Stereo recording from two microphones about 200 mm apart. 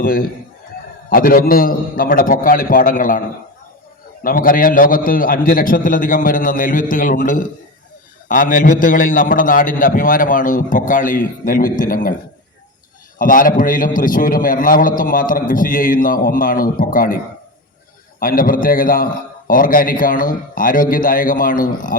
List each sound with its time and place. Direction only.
0.0 s a man's voice: 45° left (ahead or behind)
13.1 s a man's voice: 45° left (ahead or behind)
18.2 s a man's voice: 45° left (ahead or behind)